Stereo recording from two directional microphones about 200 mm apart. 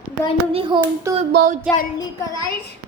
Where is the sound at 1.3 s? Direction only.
45° right (ahead or behind).